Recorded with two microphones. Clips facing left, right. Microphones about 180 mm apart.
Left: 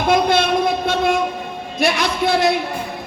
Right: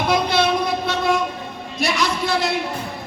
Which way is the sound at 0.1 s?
50° left (ahead or behind).